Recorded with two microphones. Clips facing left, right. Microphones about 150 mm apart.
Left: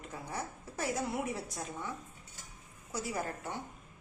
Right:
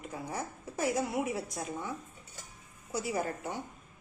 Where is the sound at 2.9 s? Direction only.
15° right (ahead or behind).